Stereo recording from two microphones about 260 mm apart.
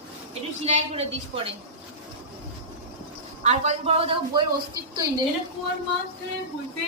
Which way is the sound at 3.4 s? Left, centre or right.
Right.